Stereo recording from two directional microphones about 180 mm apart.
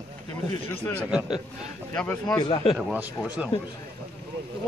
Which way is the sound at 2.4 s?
25° left (ahead or behind).